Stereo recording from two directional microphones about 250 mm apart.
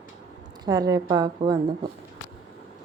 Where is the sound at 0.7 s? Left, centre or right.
Centre.